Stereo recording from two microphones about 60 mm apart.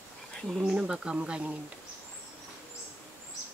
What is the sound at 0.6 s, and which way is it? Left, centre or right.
Speech, centre.